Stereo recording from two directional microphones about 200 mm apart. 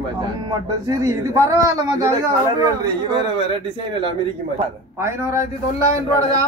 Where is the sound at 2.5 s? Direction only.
20° right (ahead or behind).